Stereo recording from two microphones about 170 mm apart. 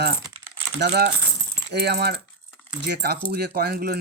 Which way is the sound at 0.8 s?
75° right (ahead or behind).